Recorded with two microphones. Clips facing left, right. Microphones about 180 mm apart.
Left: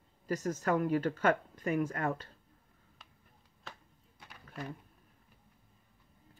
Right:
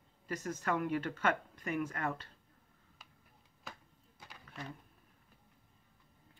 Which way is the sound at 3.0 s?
Centre (ahead or behind).